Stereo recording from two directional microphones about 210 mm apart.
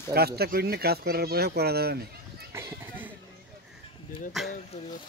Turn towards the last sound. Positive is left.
turn(degrees=0)  # may be behind; listen again after turning